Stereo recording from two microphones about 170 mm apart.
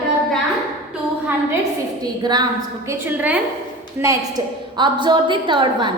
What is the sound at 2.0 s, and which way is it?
Speech, 25° right (ahead or behind).